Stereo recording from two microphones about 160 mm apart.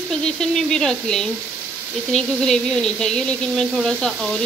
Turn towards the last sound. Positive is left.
turn(degrees=5)  # may be behind; listen again after turning